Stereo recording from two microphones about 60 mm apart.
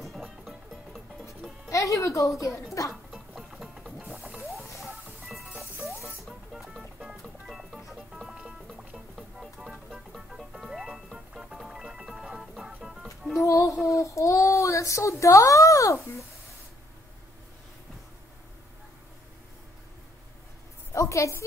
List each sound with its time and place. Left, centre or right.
0.0 s music: centre
1.7 s speech: left
2.9 s music: centre
13.4 s music: left
13.9 s child singing: left
20.9 s a sound: left